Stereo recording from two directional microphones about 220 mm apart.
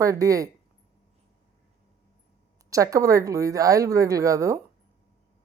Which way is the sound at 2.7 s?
15° right (ahead or behind).